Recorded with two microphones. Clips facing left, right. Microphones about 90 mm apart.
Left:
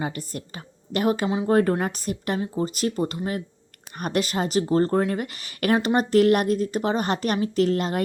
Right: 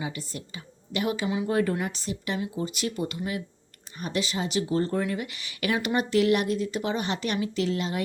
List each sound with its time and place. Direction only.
0.0 s a woman's voice: 50° left (ahead or behind)
3.9 s speech: 60° left (ahead or behind)